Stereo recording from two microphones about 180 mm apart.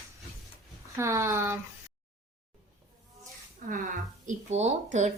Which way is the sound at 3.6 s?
45° right (ahead or behind).